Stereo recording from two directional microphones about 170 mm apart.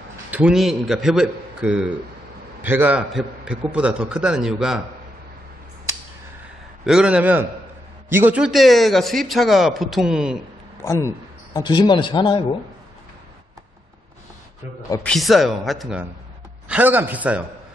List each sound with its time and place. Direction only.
0.3 s speech: 5° right (ahead or behind)
6.9 s speech: 5° right (ahead or behind)
10.8 s speech: 15° left (ahead or behind)
15.0 s speech: centre (ahead or behind)